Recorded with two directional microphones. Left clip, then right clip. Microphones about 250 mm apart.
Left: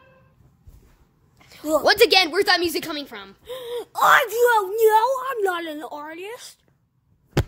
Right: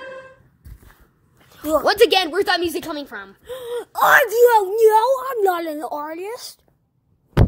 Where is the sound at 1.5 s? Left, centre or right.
Centre.